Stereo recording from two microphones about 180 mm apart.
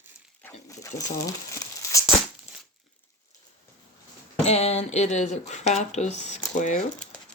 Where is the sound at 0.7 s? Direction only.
15° left (ahead or behind).